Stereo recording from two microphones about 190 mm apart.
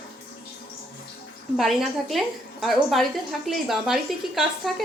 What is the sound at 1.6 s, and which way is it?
A woman's voice, centre (ahead or behind).